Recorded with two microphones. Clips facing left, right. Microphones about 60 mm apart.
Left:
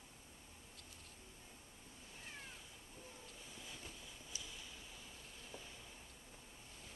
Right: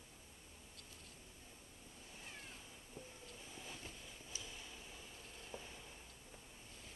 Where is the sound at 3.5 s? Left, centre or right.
Right.